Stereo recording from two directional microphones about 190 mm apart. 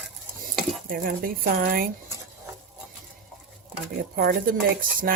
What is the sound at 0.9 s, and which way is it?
Speech, 50° right (ahead or behind).